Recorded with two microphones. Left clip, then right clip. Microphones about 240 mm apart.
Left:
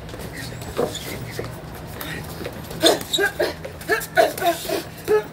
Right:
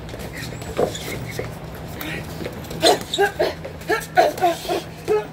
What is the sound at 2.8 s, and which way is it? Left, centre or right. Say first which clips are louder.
Dog: right 1 dB; centre.